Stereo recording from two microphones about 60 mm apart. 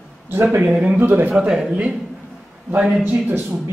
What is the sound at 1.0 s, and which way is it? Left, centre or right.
Speech, right.